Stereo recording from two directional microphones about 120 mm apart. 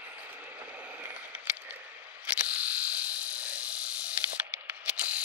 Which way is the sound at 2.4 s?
10° right (ahead or behind).